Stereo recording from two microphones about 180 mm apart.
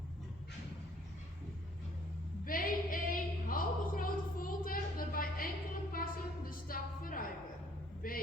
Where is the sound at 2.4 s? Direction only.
50° left (ahead or behind).